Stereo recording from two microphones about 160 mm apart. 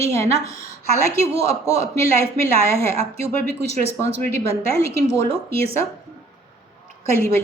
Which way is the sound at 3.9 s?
15° left (ahead or behind).